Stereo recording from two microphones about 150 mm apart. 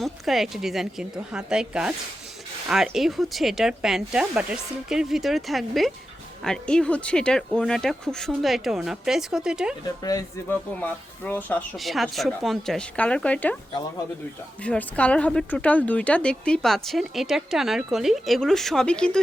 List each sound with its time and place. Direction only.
0.0 s speech: centre (ahead or behind)
10.0 s speech: 25° left (ahead or behind)
10.5 s speech: 10° left (ahead or behind)
11.8 s speech: centre (ahead or behind)
14.6 s speech: 10° left (ahead or behind)